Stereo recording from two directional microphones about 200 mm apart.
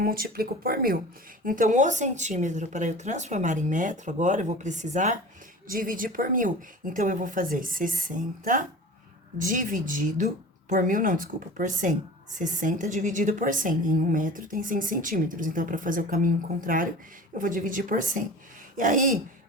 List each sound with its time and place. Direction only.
0.0 s a woman's voice: 50° right (ahead or behind)